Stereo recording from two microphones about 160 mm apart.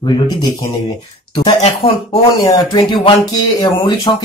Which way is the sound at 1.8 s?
40° left (ahead or behind).